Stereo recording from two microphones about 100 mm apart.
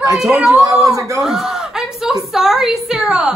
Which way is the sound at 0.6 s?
35° right (ahead or behind).